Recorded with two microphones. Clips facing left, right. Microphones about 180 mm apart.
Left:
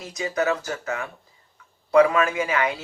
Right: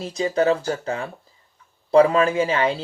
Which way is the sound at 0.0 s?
30° right (ahead or behind).